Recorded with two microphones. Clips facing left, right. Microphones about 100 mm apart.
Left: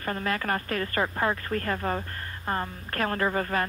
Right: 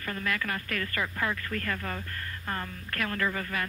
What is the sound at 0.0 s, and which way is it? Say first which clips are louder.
Speech: left 4 dB; 35° left (ahead or behind).